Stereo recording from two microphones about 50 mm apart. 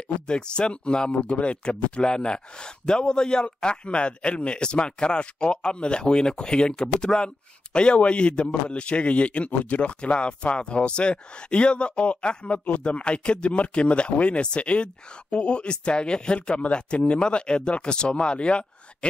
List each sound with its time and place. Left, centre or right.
0.3 s a man's voice: centre